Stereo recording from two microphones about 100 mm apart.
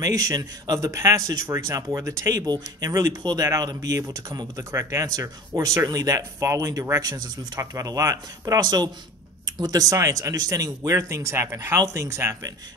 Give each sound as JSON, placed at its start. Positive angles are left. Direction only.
{"t": 0.0, "sound": "speech", "side_deg": -35}
{"t": 2.4, "sound": "speech", "side_deg": -40}